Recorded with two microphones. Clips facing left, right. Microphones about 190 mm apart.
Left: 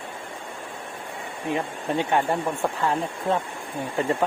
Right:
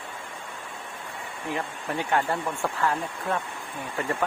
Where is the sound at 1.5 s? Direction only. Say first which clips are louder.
Left 5 dB; 20° left (ahead or behind).